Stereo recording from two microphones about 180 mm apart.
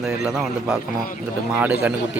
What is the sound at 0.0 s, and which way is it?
Speech, 5° right (ahead or behind).